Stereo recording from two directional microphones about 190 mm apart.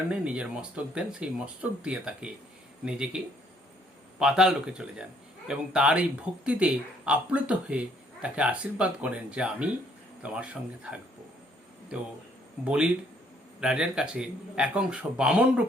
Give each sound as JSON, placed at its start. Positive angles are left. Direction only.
{"t": 0.1, "sound": "speech", "side_deg": -5}
{"t": 4.2, "sound": "speech", "side_deg": -5}
{"t": 12.6, "sound": "speech", "side_deg": -5}